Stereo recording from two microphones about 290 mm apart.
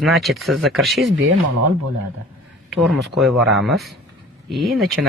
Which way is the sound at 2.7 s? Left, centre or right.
Centre.